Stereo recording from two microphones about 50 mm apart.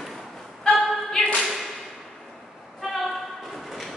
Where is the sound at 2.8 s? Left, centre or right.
Centre.